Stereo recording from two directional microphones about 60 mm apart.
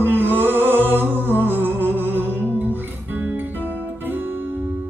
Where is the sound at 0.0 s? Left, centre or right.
Right.